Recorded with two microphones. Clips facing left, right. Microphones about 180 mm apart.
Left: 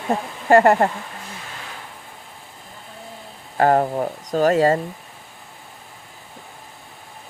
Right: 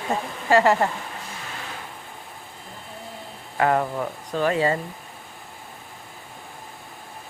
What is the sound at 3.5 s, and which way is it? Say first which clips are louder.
Speech: left 4 dB; 35° left (ahead or behind).